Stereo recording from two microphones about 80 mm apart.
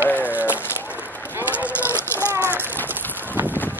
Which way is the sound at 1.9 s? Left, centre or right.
Left.